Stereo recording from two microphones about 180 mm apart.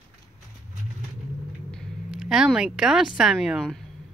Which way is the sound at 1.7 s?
Centre (ahead or behind).